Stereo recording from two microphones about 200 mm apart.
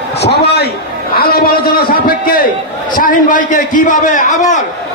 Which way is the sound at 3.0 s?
40° left (ahead or behind).